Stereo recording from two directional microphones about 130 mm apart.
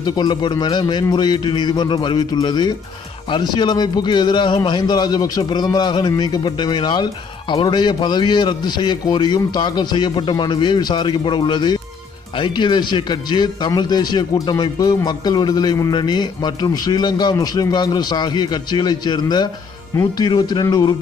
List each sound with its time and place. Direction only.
0.0 s speech: 35° left (ahead or behind)